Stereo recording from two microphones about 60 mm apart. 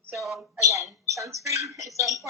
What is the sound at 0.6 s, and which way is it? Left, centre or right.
Speech, right.